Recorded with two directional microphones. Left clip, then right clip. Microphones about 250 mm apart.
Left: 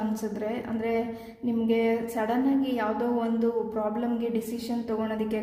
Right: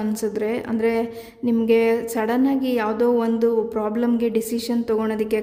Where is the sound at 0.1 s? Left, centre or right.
Right.